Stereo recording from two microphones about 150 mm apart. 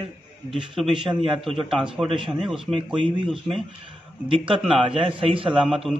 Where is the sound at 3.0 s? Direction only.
35° right (ahead or behind).